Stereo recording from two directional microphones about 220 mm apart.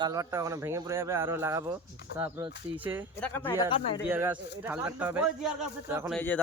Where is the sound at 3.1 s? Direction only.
10° left (ahead or behind).